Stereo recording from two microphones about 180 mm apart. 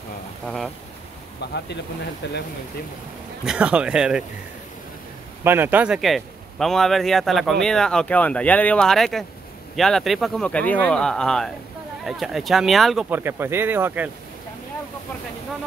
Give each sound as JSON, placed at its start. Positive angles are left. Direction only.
{"t": 1.4, "sound": "speech", "side_deg": 70}
{"t": 3.4, "sound": "a man's voice", "side_deg": -5}
{"t": 5.4, "sound": "a man's voice", "side_deg": -10}
{"t": 13.1, "sound": "speech", "side_deg": -10}